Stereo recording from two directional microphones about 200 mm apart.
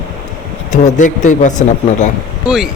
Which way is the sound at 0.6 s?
35° left (ahead or behind).